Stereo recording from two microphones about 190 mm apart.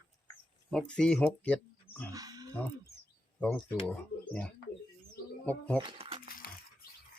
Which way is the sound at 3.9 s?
5° left (ahead or behind).